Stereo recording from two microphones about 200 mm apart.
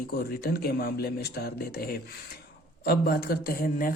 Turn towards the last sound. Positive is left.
turn(degrees=45)  # may be behind; listen again after turning